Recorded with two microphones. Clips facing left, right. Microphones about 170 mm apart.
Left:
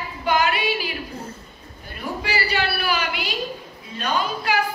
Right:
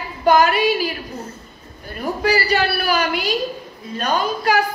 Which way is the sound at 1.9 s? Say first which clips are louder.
Right 7 dB; 40° right (ahead or behind).